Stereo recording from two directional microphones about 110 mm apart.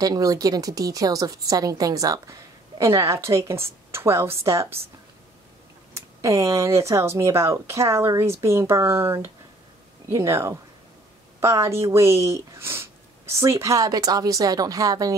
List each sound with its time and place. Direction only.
0.0 s a woman's voice: 35° right (ahead or behind)
5.9 s a woman's voice: 30° right (ahead or behind)